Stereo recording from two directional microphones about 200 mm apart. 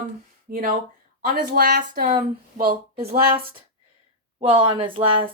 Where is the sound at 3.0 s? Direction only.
30° right (ahead or behind).